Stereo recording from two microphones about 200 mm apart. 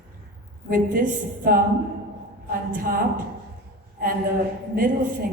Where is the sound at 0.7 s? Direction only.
40° right (ahead or behind).